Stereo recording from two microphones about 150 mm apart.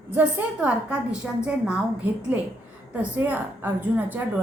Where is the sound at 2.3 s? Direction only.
10° right (ahead or behind).